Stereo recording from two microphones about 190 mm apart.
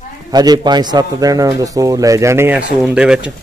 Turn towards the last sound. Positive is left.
turn(degrees=-5)  # may be behind; listen again after turning